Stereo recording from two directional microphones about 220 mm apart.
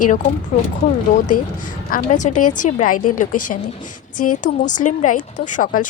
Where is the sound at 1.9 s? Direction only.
35° left (ahead or behind).